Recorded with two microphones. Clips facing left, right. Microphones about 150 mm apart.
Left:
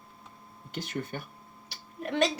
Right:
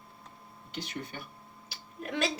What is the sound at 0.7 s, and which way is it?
Speech, 50° left (ahead or behind).